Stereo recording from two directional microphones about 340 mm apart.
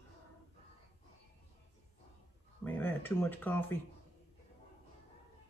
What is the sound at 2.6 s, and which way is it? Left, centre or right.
Speech, centre.